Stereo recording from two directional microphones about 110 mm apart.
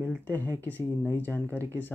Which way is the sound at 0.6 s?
15° left (ahead or behind).